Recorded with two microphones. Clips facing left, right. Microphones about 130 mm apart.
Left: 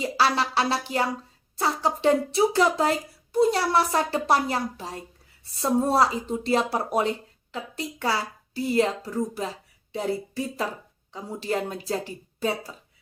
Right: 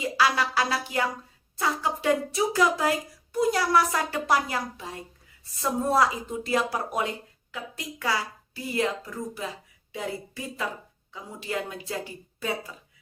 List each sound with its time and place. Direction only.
0.0 s a woman's voice: 35° left (ahead or behind)